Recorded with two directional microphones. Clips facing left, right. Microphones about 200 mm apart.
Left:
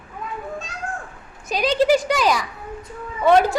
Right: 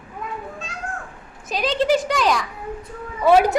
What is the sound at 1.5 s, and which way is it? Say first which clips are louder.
Speech: left 2 dB; centre (ahead or behind).